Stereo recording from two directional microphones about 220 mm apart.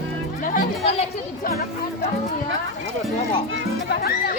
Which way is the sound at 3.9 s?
45° left (ahead or behind).